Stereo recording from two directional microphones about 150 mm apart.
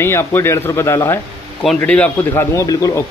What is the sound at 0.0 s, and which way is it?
A man's voice, 15° left (ahead or behind).